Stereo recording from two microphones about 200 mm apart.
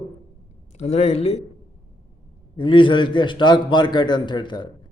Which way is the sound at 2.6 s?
25° left (ahead or behind).